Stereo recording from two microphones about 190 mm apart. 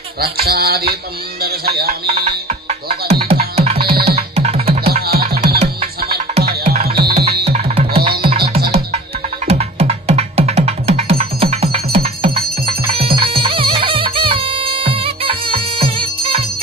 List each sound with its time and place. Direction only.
0.2 s music: 55° right (ahead or behind)
3.2 s music: 30° right (ahead or behind)
3.8 s music: 55° right (ahead or behind)
4.4 s music: 35° right (ahead or behind)
4.8 s music: 55° right (ahead or behind)
7.4 s music: 35° right (ahead or behind)
8.0 s music: 55° right (ahead or behind)
9.5 s music: 35° right (ahead or behind)